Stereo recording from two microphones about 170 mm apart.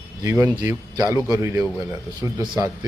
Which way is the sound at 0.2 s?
15° right (ahead or behind).